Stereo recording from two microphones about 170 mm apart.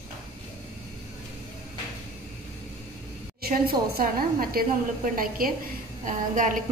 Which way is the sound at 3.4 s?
65° right (ahead or behind).